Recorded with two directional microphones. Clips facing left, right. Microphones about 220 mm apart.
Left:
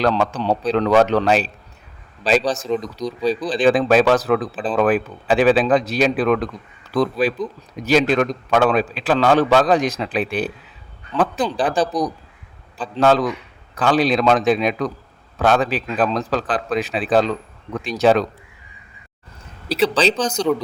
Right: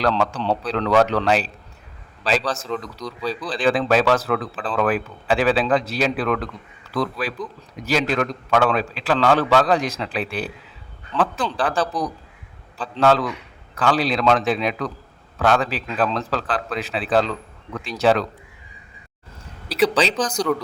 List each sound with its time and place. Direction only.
0.0 s a man's voice: 15° left (ahead or behind)
19.6 s speech: 25° left (ahead or behind)